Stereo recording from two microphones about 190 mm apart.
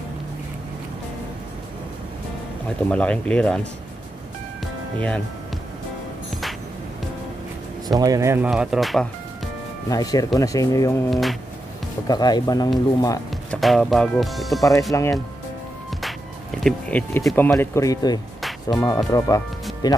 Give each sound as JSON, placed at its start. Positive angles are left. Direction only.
{"t": 2.9, "sound": "speech", "side_deg": 5}
{"t": 4.9, "sound": "speech", "side_deg": 5}
{"t": 8.0, "sound": "speech", "side_deg": -15}
{"t": 8.5, "sound": "speech", "side_deg": -5}
{"t": 9.8, "sound": "speech", "side_deg": 20}
{"t": 11.1, "sound": "speech", "side_deg": 0}
{"t": 12.1, "sound": "speech", "side_deg": 20}
{"t": 13.5, "sound": "speech", "side_deg": 0}
{"t": 14.8, "sound": "speech", "side_deg": 15}
{"t": 16.6, "sound": "speech", "side_deg": 5}
{"t": 17.6, "sound": "speech", "side_deg": 15}